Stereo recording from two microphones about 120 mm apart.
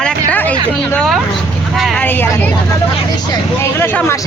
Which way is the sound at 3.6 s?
20° left (ahead or behind).